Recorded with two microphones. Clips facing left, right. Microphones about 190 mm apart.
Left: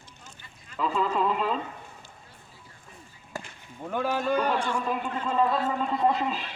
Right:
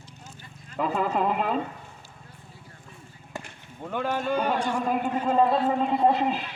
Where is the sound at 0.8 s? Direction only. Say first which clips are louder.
Right 1 dB; 55° right (ahead or behind).